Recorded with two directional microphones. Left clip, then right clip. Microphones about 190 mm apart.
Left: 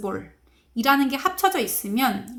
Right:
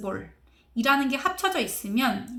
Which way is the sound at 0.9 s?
20° left (ahead or behind).